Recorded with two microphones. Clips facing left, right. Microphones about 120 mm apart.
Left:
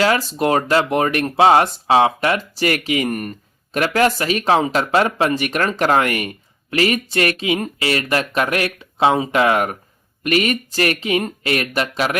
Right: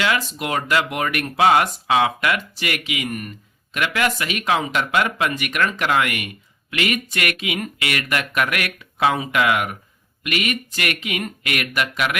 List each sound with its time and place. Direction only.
0.0 s speech: 35° left (ahead or behind)